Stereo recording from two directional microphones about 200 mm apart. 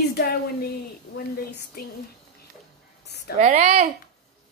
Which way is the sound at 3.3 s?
35° right (ahead or behind).